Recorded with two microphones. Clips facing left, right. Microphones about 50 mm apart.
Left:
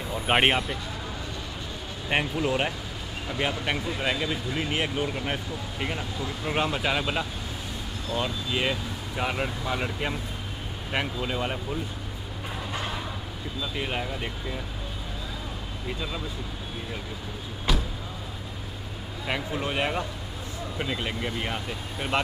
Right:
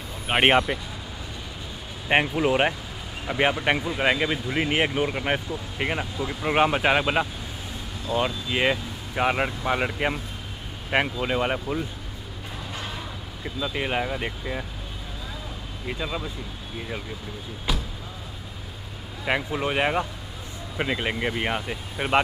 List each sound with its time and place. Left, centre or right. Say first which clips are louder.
0.3 s speech: even; centre
0.7 s speech: right 4 dB; centre
2.0 s speech: right 5 dB; right
13.6 s speech: right 5 dB; centre
15.9 s speech: right 4 dB; centre
17.7 s a sound: left 1 dB; centre
19.2 s speech: right 4 dB; centre